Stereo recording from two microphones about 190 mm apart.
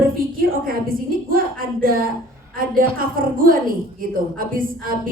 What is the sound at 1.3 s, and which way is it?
A woman's voice, 50° right (ahead or behind).